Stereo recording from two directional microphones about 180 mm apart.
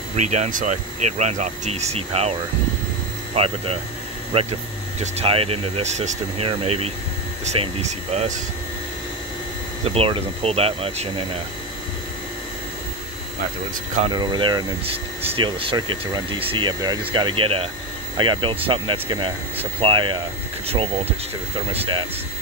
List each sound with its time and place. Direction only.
0.1 s speech: 40° right (ahead or behind)
3.3 s speech: 35° right (ahead or behind)
9.9 s speech: 30° right (ahead or behind)
14.1 s speech: 25° right (ahead or behind)